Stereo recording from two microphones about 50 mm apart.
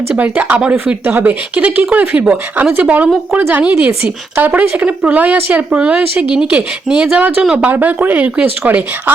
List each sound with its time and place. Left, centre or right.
0.2 s speech: right
7.2 s speech: right